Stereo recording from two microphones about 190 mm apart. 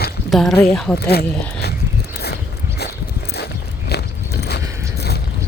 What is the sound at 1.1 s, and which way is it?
Speech, 55° left (ahead or behind).